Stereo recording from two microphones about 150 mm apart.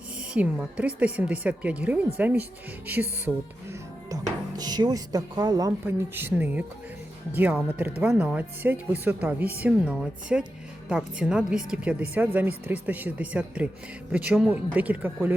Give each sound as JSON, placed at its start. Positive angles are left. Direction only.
{"t": 0.2, "sound": "a woman's voice", "side_deg": -5}
{"t": 4.1, "sound": "a woman's voice", "side_deg": -25}